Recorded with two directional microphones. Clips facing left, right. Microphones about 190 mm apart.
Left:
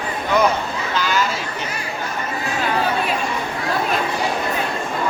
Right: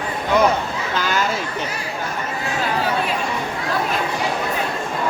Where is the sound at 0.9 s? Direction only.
50° right (ahead or behind).